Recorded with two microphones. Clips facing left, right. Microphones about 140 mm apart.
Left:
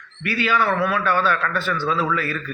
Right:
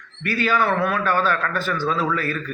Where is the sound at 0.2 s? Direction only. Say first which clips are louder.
Even; 45° right (ahead or behind).